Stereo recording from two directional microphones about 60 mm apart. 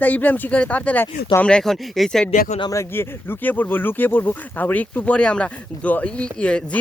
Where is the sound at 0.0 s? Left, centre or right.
Left.